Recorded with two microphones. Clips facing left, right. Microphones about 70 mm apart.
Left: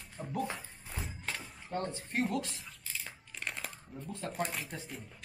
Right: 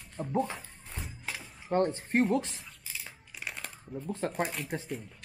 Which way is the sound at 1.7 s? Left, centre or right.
Right.